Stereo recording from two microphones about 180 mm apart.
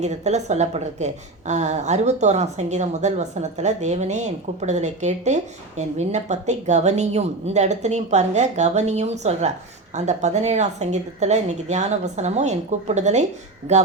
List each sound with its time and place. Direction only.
0.0 s a woman's voice: 40° right (ahead or behind)